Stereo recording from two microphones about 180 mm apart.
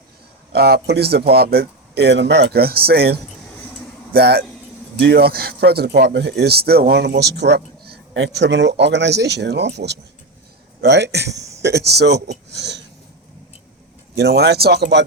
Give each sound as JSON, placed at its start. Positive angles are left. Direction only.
{"t": 0.5, "sound": "speech", "side_deg": -60}
{"t": 12.5, "sound": "a sound", "side_deg": -75}
{"t": 14.2, "sound": "speech", "side_deg": -65}